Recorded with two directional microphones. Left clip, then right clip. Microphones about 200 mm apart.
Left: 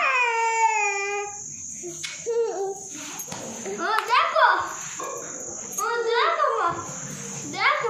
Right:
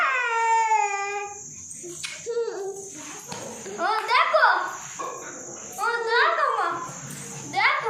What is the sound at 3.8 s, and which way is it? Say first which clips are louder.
Children playing: even; 20° right (ahead or behind).